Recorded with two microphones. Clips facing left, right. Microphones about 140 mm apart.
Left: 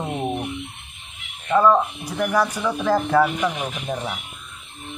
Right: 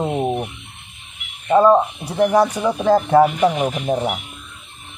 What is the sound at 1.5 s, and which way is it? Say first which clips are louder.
Speech: right 4 dB; 30° right (ahead or behind).